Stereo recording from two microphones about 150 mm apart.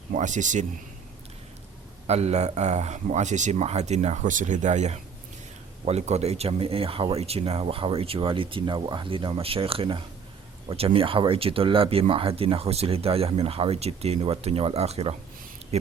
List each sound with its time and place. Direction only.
0.1 s speech: 55° right (ahead or behind)
2.0 s speech: 45° right (ahead or behind)